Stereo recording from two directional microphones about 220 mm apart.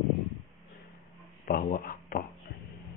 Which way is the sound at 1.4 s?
40° left (ahead or behind).